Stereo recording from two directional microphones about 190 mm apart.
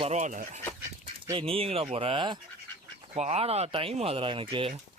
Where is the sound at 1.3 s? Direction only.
30° right (ahead or behind).